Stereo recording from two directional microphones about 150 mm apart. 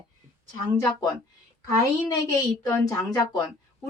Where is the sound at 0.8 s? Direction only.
20° left (ahead or behind).